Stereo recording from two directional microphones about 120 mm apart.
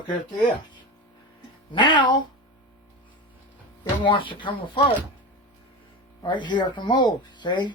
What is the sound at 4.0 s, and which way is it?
Speech, 45° left (ahead or behind).